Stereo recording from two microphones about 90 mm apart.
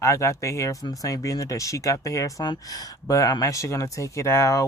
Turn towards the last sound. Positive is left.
turn(degrees=35)  # may be behind; listen again after turning